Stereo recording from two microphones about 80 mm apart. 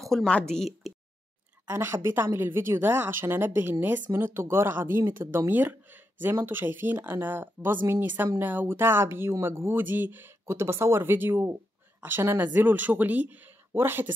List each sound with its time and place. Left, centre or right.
0.0 s a woman's voice: centre
1.7 s speech: right